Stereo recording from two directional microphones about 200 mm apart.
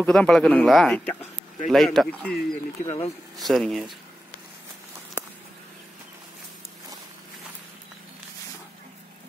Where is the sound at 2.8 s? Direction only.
30° left (ahead or behind).